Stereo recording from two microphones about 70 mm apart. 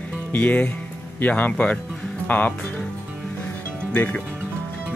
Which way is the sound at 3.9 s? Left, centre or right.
Left.